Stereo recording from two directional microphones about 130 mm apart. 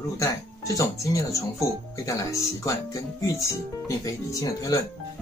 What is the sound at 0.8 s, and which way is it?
Speech, 25° left (ahead or behind).